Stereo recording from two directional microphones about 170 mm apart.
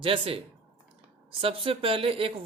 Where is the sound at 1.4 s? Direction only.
35° right (ahead or behind).